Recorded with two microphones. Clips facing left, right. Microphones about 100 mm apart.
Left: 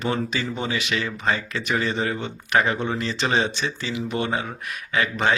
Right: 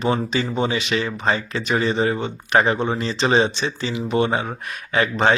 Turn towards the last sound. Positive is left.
turn(degrees=-35)  # may be behind; listen again after turning